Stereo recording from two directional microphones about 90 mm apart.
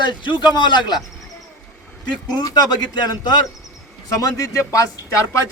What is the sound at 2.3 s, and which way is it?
Speech, 50° left (ahead or behind).